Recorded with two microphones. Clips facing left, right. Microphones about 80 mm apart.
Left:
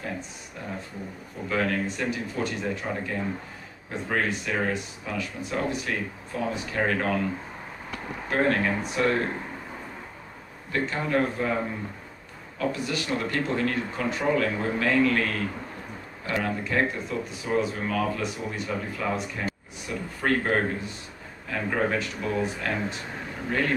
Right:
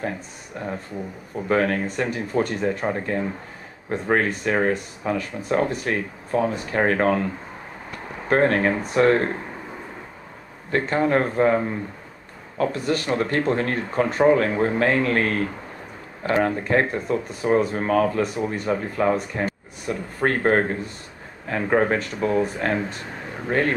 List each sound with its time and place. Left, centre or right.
1.5 s speech: right
8.3 s speech: right
10.7 s speech: right